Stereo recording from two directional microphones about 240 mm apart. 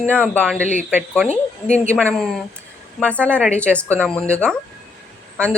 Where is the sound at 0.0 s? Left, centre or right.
Centre.